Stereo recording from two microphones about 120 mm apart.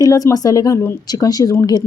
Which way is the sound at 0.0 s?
30° left (ahead or behind).